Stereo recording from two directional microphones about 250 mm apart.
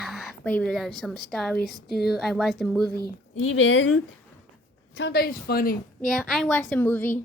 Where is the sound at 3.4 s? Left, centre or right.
Left.